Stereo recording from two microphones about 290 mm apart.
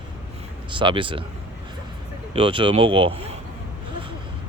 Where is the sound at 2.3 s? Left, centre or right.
Centre.